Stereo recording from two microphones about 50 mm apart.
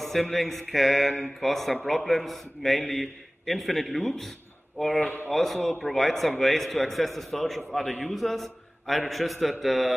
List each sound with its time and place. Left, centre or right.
0.0 s a man's voice: centre